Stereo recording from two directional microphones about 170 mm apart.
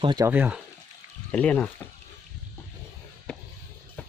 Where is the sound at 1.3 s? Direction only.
10° left (ahead or behind).